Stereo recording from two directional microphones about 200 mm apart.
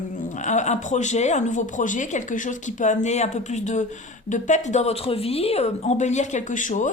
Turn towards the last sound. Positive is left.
turn(degrees=40)  # may be behind; listen again after turning